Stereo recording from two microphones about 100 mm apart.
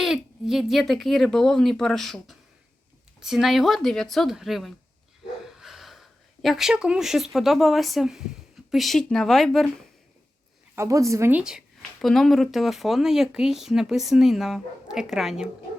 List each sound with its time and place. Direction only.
0.0 s speech: 5° right (ahead or behind)
10.8 s a woman's voice: 30° right (ahead or behind)
11.3 s speech: 10° right (ahead or behind)
11.8 s speech: 5° left (ahead or behind)